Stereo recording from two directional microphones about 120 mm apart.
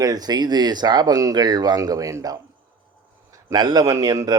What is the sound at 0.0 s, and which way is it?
A man's voice, 35° right (ahead or behind).